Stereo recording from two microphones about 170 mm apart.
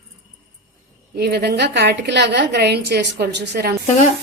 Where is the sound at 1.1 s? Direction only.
70° right (ahead or behind).